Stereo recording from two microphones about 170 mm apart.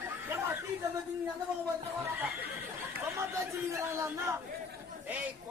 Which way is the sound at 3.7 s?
15° right (ahead or behind).